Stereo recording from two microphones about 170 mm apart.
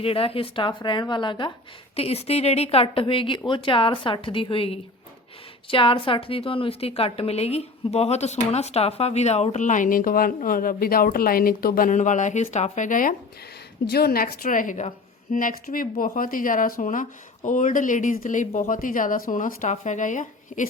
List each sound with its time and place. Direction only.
0.0 s a woman's voice: 35° left (ahead or behind); by 13.1 s 50° left (ahead or behind)
13.9 s a woman's voice: 65° left (ahead or behind); by 20.7 s 50° left (ahead or behind)